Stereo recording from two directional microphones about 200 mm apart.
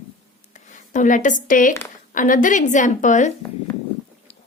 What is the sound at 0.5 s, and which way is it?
A woman's voice, 40° left (ahead or behind).